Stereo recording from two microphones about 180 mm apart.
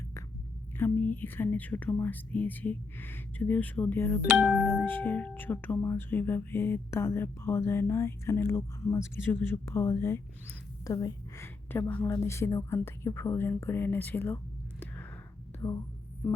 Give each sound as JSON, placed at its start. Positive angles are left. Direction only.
{"t": 0.8, "sound": "a woman's voice", "side_deg": 10}